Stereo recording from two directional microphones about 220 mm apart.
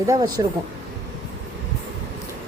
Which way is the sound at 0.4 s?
15° right (ahead or behind).